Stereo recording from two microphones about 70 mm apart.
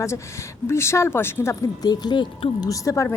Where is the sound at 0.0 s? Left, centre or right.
Left.